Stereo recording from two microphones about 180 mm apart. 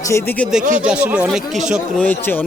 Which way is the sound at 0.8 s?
5° right (ahead or behind).